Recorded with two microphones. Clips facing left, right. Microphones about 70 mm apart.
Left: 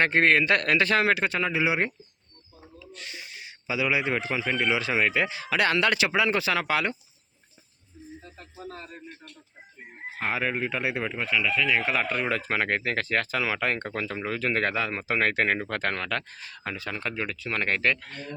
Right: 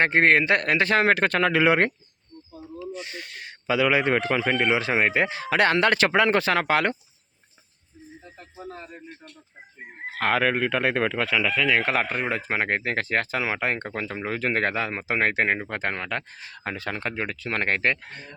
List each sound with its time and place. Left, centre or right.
0.0 s speech: right
1.2 s speech: right
3.1 s a man's voice: right
4.7 s speech: right
8.2 s speech: centre
10.1 s speech: right
11.7 s speech: right
11.9 s speech: right
12.2 s speech: right